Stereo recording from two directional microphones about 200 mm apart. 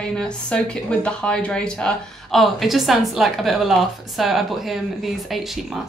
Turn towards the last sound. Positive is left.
turn(degrees=0)  # may be behind; listen again after turning